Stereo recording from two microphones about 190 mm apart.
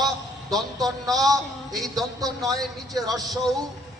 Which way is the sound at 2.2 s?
20° right (ahead or behind).